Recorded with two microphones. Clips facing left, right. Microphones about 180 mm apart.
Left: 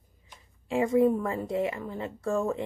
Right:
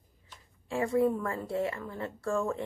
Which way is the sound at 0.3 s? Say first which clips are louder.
Left 5 dB; 20° left (ahead or behind).